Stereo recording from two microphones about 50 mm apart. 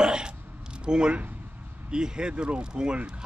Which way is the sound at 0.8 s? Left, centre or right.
Centre.